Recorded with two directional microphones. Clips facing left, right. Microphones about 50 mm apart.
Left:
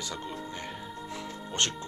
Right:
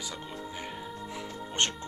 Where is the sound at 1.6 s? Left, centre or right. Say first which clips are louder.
Right 1 dB; right.